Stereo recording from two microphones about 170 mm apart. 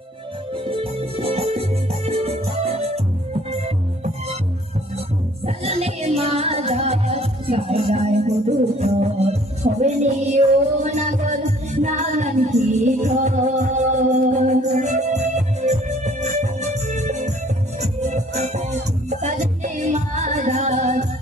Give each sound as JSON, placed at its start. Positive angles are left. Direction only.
{"t": 0.7, "sound": "music", "side_deg": -35}
{"t": 5.4, "sound": "music", "side_deg": -35}